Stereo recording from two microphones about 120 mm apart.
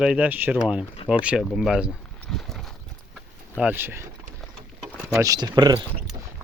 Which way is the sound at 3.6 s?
15° right (ahead or behind).